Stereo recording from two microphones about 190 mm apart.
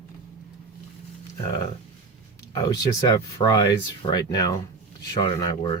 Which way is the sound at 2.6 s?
20° left (ahead or behind).